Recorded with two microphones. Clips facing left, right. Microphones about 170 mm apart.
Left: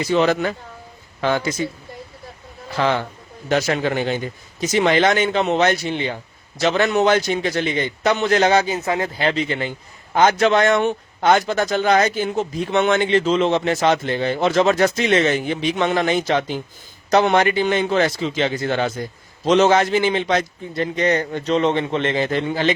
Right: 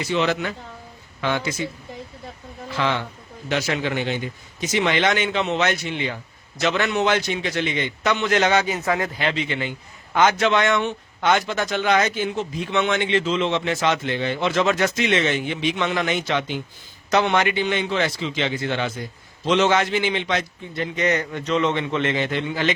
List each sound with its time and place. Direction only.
0.1 s a man's voice: 40° left (ahead or behind)
2.7 s a man's voice: 40° left (ahead or behind)